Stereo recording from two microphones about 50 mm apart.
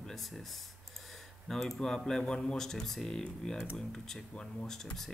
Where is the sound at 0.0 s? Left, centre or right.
Centre.